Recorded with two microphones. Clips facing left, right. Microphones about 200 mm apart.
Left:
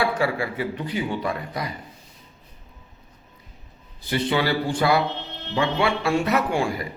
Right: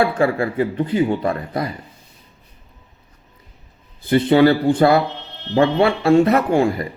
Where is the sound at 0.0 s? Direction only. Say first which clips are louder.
Right 6 dB; 50° right (ahead or behind).